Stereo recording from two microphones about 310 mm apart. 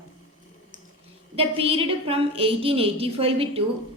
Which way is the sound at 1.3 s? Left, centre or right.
Centre.